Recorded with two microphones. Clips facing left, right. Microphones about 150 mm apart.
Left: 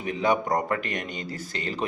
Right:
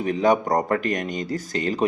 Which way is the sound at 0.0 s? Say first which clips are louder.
Right 5 dB; 40° right (ahead or behind).